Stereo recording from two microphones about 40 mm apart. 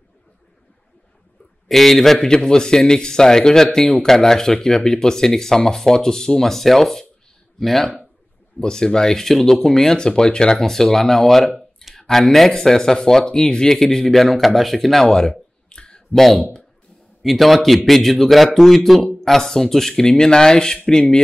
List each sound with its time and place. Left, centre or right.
1.7 s speech: centre
9.9 s speech: centre
15.0 s a sound: centre
16.1 s a man's voice: centre